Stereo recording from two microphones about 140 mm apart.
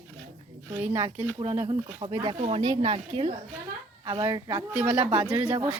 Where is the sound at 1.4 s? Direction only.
45° right (ahead or behind).